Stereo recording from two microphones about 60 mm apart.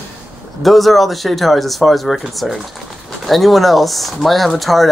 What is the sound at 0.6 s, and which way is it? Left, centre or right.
Speech, centre.